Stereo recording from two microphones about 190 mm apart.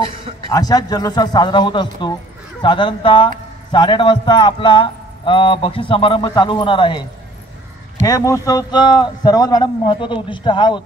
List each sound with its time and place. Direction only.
0.5 s speech: 20° left (ahead or behind)